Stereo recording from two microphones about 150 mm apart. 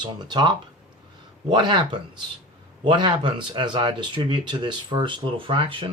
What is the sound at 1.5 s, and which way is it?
Speech, 30° right (ahead or behind).